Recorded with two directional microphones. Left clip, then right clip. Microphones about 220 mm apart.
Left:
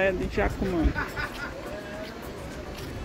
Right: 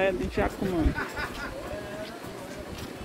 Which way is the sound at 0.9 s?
50° right (ahead or behind).